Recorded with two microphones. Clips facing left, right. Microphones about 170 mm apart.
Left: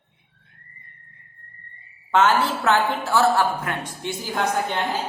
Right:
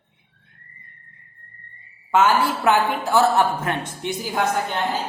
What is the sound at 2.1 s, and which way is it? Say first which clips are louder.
A woman's voice: right 1 dB; 10° right (ahead or behind).